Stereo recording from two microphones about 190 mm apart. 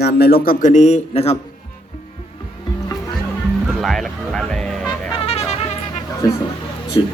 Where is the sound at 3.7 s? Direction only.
Centre (ahead or behind).